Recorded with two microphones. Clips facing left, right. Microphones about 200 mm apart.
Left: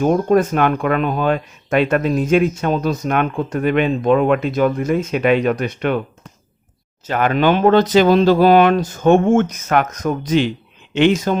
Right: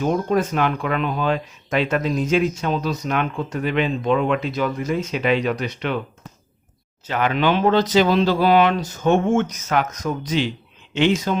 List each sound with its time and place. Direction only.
0.0 s speech: 50° left (ahead or behind)
7.0 s speech: 45° left (ahead or behind)